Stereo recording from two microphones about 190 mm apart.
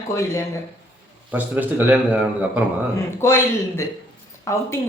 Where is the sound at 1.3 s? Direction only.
10° right (ahead or behind).